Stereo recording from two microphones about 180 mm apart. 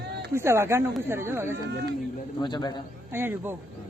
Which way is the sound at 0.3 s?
15° right (ahead or behind).